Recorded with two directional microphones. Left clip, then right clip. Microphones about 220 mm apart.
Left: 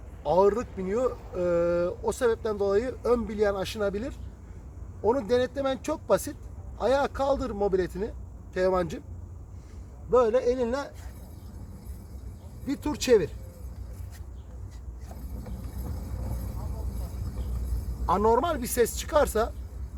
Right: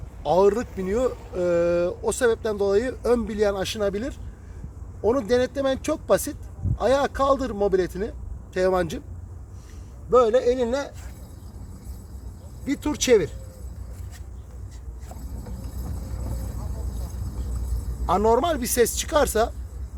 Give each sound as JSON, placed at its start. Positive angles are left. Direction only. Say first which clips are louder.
{"t": 0.2, "sound": "speech", "louder": "right 3 dB", "side_deg": -25}
{"t": 10.1, "sound": "speech", "louder": "right 4 dB", "side_deg": -20}
{"t": 12.6, "sound": "speech", "louder": "right 4 dB", "side_deg": -15}
{"t": 18.0, "sound": "speech", "louder": "right 3 dB", "side_deg": -15}